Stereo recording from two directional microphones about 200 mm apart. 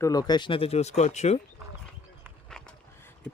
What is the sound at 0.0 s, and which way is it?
Speech, 20° left (ahead or behind).